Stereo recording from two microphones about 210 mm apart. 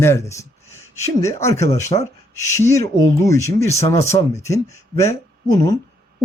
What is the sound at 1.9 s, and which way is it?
Speech, 25° left (ahead or behind).